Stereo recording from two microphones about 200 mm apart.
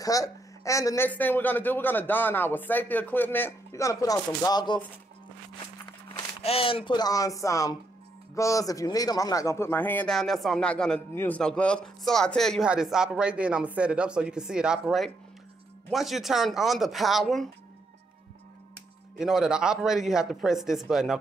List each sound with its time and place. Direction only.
0.0 s a man's voice: 15° left (ahead or behind)
6.1 s a man's voice: 30° left (ahead or behind); by 17.5 s centre (ahead or behind)
19.1 s a man's voice: centre (ahead or behind)